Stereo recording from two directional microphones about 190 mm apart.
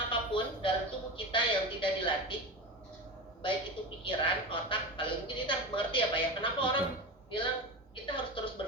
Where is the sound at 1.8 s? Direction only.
25° left (ahead or behind).